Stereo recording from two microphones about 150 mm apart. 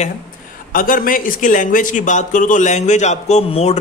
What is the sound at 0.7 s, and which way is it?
A man's voice, 65° left (ahead or behind).